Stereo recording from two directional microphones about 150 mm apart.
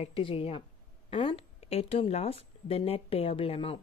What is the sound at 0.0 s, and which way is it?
Speech, 40° left (ahead or behind).